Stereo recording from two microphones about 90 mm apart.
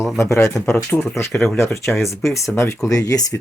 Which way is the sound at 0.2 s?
30° left (ahead or behind).